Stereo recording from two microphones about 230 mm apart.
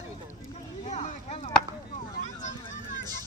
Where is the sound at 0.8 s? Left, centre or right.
Left.